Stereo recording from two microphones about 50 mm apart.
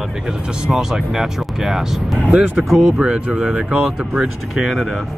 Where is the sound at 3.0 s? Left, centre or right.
Centre.